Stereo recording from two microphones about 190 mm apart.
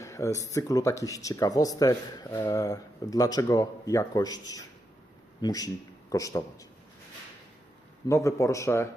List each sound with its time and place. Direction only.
0.0 s speech: 15° left (ahead or behind)
8.0 s speech: 15° left (ahead or behind)